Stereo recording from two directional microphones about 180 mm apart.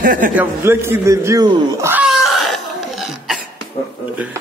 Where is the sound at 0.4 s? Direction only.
15° right (ahead or behind).